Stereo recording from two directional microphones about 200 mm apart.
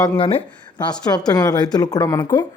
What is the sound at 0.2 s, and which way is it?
A man's voice, 25° left (ahead or behind).